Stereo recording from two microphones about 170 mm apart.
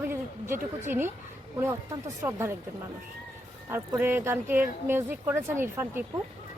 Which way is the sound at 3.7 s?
10° right (ahead or behind).